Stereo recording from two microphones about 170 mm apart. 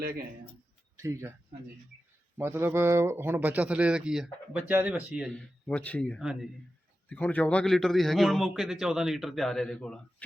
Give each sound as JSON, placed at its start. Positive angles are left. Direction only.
{"t": 0.9, "sound": "speech", "side_deg": -15}
{"t": 2.4, "sound": "speech", "side_deg": -15}
{"t": 5.3, "sound": "a man's voice", "side_deg": 5}
{"t": 7.1, "sound": "a man's voice", "side_deg": 10}